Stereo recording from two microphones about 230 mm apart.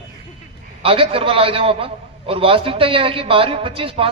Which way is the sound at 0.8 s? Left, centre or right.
Right.